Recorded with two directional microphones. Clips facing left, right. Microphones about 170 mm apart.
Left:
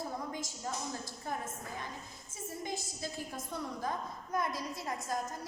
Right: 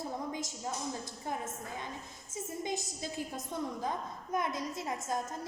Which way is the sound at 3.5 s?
20° right (ahead or behind).